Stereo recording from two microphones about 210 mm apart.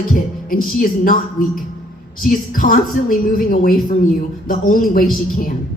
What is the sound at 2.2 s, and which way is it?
Speech, 40° left (ahead or behind).